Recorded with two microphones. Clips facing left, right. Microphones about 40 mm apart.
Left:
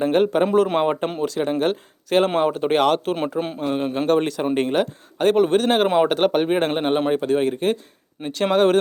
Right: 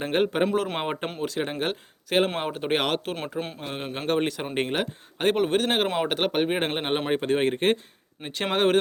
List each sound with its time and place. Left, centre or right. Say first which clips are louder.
0.0 s speech: left 6 dB; centre
3.2 s a man's voice: left 7 dB; centre
3.6 s speech: left 10 dB; centre
5.4 s speech: left 7 dB; centre
7.1 s speech: left 4 dB; right
8.2 s a man's voice: left 8 dB; centre
8.5 s speech: left 4 dB; centre